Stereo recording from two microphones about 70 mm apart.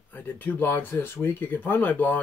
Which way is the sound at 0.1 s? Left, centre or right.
Left.